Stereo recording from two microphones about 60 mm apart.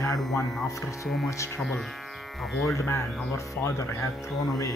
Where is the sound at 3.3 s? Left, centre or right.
Left.